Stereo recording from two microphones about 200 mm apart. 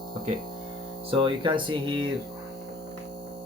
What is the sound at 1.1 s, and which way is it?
Speech, 25° right (ahead or behind).